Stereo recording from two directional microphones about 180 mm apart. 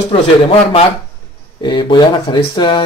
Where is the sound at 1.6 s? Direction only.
25° left (ahead or behind).